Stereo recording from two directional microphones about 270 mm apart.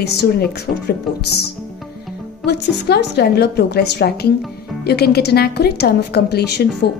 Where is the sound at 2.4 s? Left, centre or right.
Left.